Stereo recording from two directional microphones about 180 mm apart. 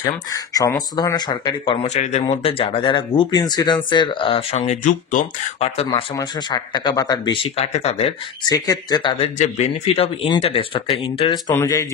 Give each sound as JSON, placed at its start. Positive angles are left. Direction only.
{"t": 0.0, "sound": "speech", "side_deg": 20}
{"t": 5.9, "sound": "speech", "side_deg": 25}
{"t": 7.5, "sound": "speech", "side_deg": 35}
{"t": 8.5, "sound": "speech", "side_deg": 20}
{"t": 11.5, "sound": "speech", "side_deg": 20}